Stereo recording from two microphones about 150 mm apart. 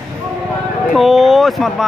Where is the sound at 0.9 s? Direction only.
Centre (ahead or behind).